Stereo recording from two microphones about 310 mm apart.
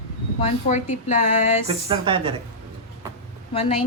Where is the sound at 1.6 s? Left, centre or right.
Centre.